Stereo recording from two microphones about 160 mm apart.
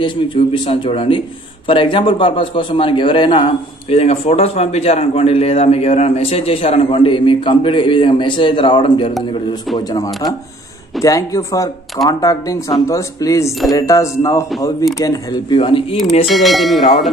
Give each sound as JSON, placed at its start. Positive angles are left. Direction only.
{"t": 0.0, "sound": "a man's voice", "side_deg": 30}
{"t": 16.3, "sound": "bell", "side_deg": 0}